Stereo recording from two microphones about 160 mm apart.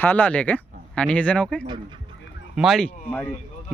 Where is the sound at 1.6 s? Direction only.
30° right (ahead or behind).